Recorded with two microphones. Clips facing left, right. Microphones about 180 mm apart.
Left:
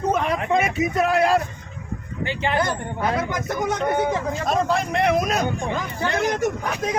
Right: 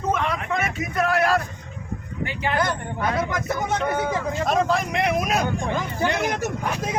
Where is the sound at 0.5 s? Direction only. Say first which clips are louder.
Left 8 dB; 20° left (ahead or behind).